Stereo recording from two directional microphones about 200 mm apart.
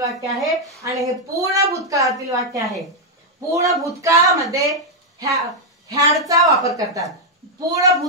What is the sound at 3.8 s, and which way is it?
Speech, 15° right (ahead or behind).